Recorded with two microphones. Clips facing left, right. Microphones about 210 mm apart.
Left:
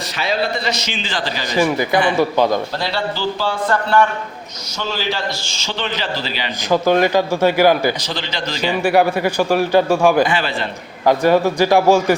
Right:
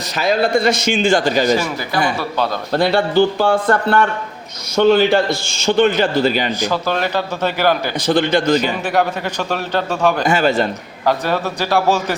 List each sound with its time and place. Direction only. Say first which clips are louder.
0.2 s a man's voice: right 6 dB; 50° right (ahead or behind)
2.1 s a man's voice: left 5 dB; 15° left (ahead or behind)
2.7 s a man's voice: right 8 dB; 55° right (ahead or behind)
6.7 s a man's voice: left 5 dB; 15° left (ahead or behind)
8.0 s a man's voice: right 11 dB; 55° right (ahead or behind)
8.8 s a man's voice: left 4 dB; 10° left (ahead or behind)
10.2 s a man's voice: right 6 dB; 45° right (ahead or behind)
11.0 s a man's voice: left 5 dB; 10° left (ahead or behind)